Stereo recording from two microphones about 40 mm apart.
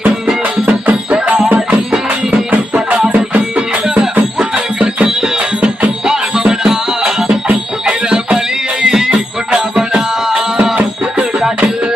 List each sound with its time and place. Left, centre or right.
0.6 s music: right
1.5 s music: right
3.8 s music: centre
8.8 s music: centre